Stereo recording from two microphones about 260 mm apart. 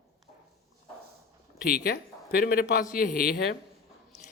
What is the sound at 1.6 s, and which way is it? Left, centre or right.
Speech, left.